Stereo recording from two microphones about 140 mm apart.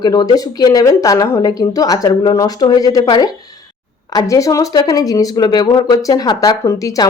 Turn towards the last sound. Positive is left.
turn(degrees=25)  # may be behind; listen again after turning